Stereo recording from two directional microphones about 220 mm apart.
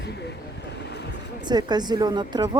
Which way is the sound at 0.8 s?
50° left (ahead or behind).